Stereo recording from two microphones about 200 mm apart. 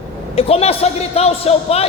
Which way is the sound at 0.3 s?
30° left (ahead or behind).